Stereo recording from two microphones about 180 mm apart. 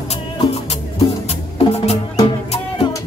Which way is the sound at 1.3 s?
35° left (ahead or behind).